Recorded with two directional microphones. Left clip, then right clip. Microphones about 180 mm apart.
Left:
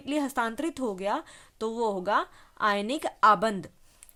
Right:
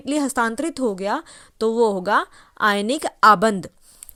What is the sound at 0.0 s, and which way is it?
Speech, 35° right (ahead or behind).